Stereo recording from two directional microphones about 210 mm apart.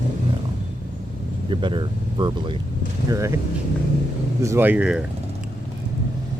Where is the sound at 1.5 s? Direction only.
25° right (ahead or behind).